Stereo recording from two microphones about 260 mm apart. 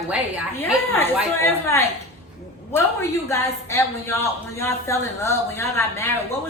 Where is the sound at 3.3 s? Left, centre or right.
Centre.